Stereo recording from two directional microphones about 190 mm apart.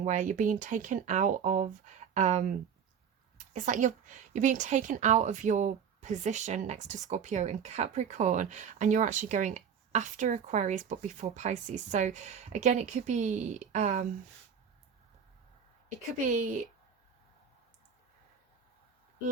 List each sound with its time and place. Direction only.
0.0 s a woman's voice: 40° right (ahead or behind)
15.9 s a woman's voice: 40° right (ahead or behind)